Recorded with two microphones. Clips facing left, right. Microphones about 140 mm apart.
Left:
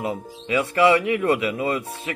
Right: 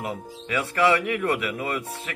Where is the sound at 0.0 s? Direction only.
25° left (ahead or behind).